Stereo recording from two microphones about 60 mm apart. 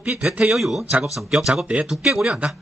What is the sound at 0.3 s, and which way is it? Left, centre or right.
Speech, right.